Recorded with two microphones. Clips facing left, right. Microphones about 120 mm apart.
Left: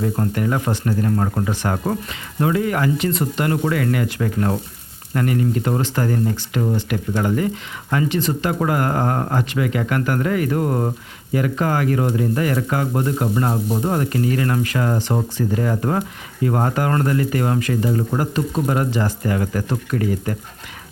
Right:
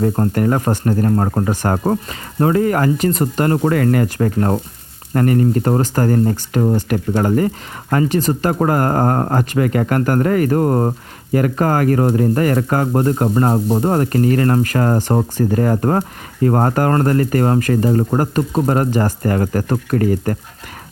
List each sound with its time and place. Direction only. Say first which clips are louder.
0.0 s speech: right 5 dB; 45° right (ahead or behind)